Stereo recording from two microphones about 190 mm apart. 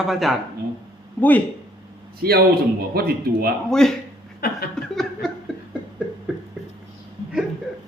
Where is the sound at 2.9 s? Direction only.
55° right (ahead or behind).